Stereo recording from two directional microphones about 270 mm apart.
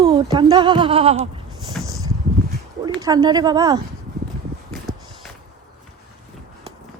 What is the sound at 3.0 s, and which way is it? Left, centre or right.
Speech, centre.